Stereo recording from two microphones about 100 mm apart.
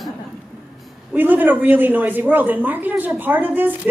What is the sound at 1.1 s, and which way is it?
A woman's voice, 20° right (ahead or behind).